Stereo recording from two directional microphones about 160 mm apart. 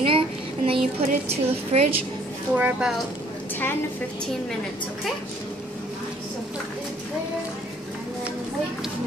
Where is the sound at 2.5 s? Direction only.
10° right (ahead or behind).